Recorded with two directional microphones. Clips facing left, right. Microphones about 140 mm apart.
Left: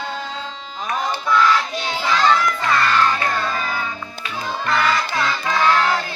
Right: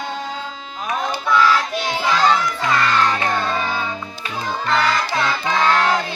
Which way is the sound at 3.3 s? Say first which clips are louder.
Right 2 dB; 25° right (ahead or behind).